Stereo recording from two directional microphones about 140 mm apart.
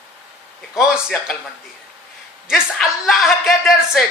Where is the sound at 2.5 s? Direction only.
Centre (ahead or behind).